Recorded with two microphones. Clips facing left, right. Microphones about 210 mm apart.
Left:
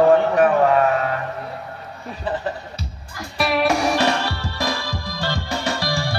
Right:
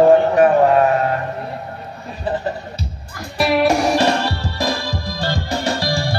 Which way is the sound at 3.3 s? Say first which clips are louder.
Right 4 dB; 30° right (ahead or behind).